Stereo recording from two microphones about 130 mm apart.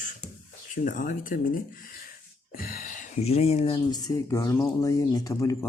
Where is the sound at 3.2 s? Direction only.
50° left (ahead or behind).